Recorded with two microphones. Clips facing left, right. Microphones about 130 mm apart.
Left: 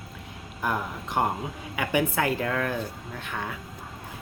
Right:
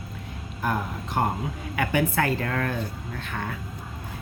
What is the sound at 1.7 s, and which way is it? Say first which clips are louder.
Speech: right 1 dB; 15° left (ahead or behind).